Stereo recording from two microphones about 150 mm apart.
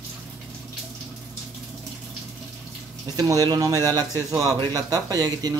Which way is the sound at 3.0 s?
25° right (ahead or behind).